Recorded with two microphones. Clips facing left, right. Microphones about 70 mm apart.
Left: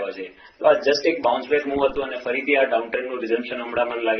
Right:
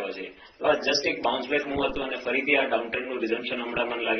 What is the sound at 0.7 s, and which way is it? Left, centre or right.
Speech, left.